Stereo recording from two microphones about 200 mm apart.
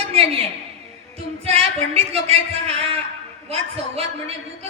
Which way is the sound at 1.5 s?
30° right (ahead or behind).